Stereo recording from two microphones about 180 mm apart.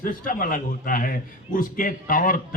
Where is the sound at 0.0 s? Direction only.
50° left (ahead or behind).